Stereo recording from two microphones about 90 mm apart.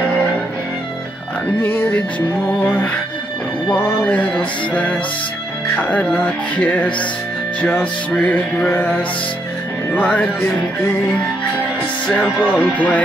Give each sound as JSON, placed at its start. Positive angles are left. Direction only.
{"t": 1.6, "sound": "music", "side_deg": 25}
{"t": 4.0, "sound": "music", "side_deg": 10}
{"t": 9.9, "sound": "music", "side_deg": 15}
{"t": 12.4, "sound": "music", "side_deg": 15}